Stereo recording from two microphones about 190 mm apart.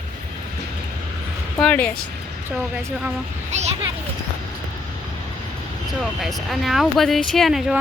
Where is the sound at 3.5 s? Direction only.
35° right (ahead or behind).